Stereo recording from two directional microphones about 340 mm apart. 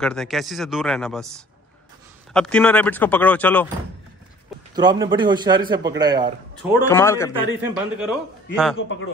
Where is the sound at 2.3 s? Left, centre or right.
Centre.